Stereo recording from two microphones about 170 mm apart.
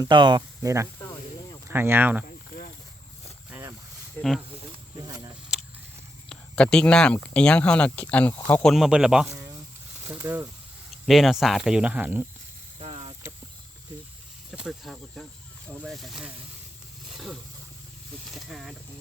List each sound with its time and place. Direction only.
0.0 s speech: 25° right (ahead or behind); by 2.2 s 10° right (ahead or behind)
3.5 s a sound: 10° right (ahead or behind)
4.2 s speech: centre (ahead or behind)
4.5 s snake: 30° right (ahead or behind)
6.2 s speech: 5° left (ahead or behind)
8.7 s speech: 5° right (ahead or behind)
9.3 s a sound: 20° right (ahead or behind)
10.0 s speech: 10° right (ahead or behind)
11.0 s speech: centre (ahead or behind)
12.8 s a sound: 35° right (ahead or behind)
14.5 s speech: 5° right (ahead or behind)
17.1 s roaring cats: centre (ahead or behind)
18.3 s speech: centre (ahead or behind)